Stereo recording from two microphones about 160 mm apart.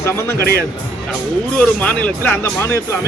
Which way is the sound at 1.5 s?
5° left (ahead or behind).